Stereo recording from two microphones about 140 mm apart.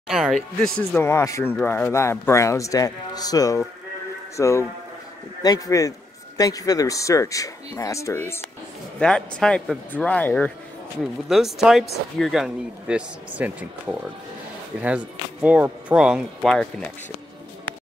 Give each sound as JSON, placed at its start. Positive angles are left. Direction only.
{"t": 0.1, "sound": "speech", "side_deg": -5}
{"t": 0.7, "sound": "a man's voice", "side_deg": 15}
{"t": 9.0, "sound": "speech", "side_deg": 5}
{"t": 11.2, "sound": "speech", "side_deg": -5}